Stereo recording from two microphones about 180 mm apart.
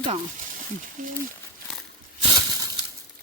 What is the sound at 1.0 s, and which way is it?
Speech, 45° right (ahead or behind).